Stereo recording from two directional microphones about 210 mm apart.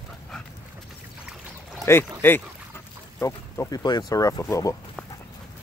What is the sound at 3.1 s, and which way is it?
Speech, 15° left (ahead or behind).